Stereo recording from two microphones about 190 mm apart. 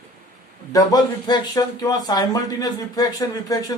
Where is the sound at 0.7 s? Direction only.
20° left (ahead or behind).